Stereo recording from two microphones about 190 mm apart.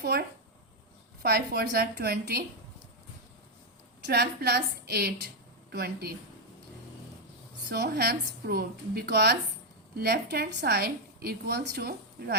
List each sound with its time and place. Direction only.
0.0 s a woman's voice: 55° right (ahead or behind)
4.0 s a woman's voice: 55° right (ahead or behind)
7.7 s a woman's voice: 55° right (ahead or behind)